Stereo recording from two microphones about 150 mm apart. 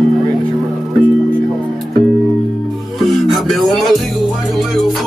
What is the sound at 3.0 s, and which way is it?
Music, centre (ahead or behind).